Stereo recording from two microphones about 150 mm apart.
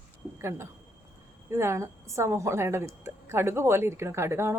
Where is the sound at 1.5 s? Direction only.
20° right (ahead or behind).